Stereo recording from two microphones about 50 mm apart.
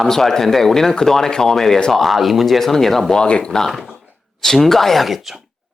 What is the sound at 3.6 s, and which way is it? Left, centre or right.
Speech, centre.